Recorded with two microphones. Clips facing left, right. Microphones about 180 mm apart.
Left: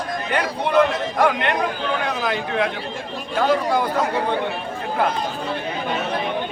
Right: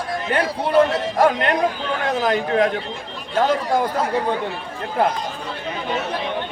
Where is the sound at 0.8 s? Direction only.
40° right (ahead or behind).